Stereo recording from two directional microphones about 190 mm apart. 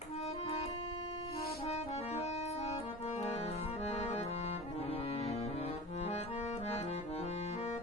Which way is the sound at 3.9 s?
35° left (ahead or behind).